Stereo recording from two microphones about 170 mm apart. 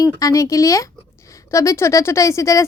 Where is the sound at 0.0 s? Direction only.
20° left (ahead or behind).